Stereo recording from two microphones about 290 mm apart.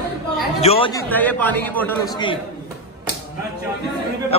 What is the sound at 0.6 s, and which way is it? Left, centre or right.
Speech, centre.